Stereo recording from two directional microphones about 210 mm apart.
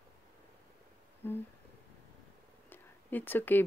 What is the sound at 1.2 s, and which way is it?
Speech, 10° left (ahead or behind).